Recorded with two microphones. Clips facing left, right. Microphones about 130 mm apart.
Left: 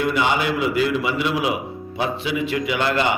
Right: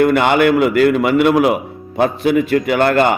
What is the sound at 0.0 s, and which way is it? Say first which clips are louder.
A man's voice: right 8 dB; 60° right (ahead or behind).